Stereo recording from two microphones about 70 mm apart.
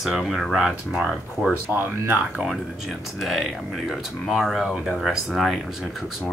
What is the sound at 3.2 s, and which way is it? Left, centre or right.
Speech, centre.